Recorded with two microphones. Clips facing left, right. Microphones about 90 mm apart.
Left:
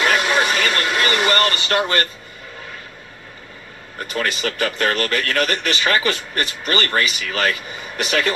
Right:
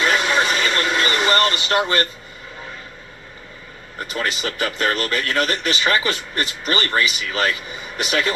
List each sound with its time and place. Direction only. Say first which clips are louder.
0.6 s vehicle: even; 25° right (ahead or behind)
4.0 s speech: left 2 dB; 20° right (ahead or behind)